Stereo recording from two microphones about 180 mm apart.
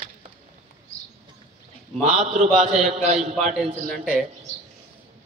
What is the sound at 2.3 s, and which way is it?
A man's voice, 40° right (ahead or behind).